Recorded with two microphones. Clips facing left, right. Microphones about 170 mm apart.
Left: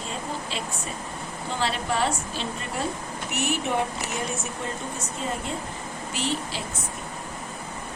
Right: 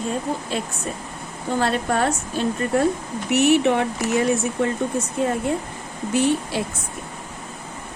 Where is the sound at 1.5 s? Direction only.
50° right (ahead or behind).